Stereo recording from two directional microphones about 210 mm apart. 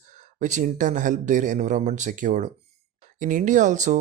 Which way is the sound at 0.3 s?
35° right (ahead or behind).